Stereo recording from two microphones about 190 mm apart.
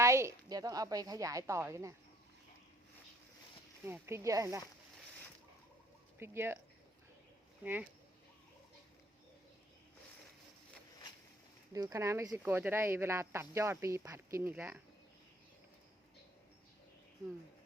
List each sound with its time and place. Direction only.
0.0 s speech: 15° right (ahead or behind)
3.8 s speech: 10° right (ahead or behind)
6.1 s speech: 10° right (ahead or behind)
7.6 s speech: 10° right (ahead or behind)
11.7 s speech: 20° right (ahead or behind)